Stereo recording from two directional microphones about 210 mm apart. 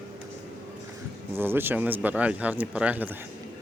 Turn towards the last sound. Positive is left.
turn(degrees=-5)  # may be behind; listen again after turning